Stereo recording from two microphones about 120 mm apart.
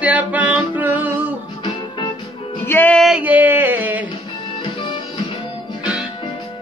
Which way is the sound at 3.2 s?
15° right (ahead or behind).